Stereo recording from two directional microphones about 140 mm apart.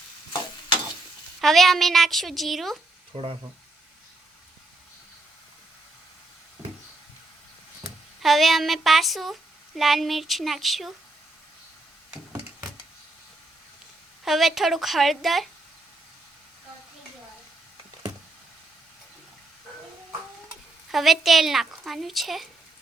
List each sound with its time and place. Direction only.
1.4 s speech: centre (ahead or behind)
3.1 s speech: 40° right (ahead or behind)
8.2 s speech: centre (ahead or behind)
14.3 s speech: centre (ahead or behind)
20.9 s speech: centre (ahead or behind)